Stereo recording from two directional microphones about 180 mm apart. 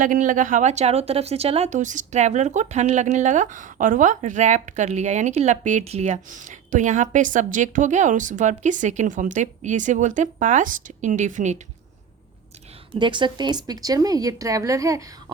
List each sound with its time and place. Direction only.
0.0 s speech: 45° right (ahead or behind)
13.0 s speech: 25° right (ahead or behind)